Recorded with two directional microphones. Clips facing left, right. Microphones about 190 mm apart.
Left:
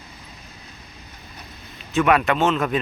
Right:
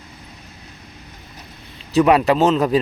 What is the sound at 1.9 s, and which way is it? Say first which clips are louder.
Speech: right 5 dB; 35° right (ahead or behind).